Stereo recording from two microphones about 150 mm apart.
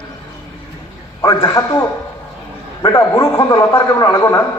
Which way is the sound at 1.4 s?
20° left (ahead or behind).